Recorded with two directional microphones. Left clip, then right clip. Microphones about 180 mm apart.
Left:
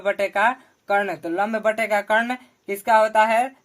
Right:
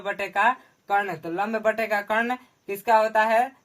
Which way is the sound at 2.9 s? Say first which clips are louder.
Left 3 dB; 40° left (ahead or behind).